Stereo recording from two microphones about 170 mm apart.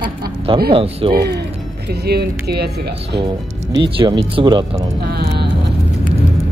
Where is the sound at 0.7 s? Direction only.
35° right (ahead or behind).